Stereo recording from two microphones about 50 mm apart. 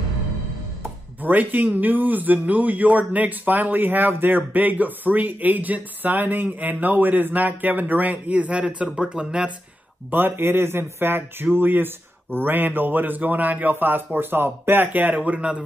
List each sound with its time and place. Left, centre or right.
1.2 s speech: right; by 9.5 s centre
10.1 s speech: right